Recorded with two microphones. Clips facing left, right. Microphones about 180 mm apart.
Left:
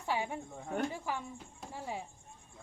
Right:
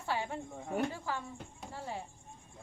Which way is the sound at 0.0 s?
15° left (ahead or behind).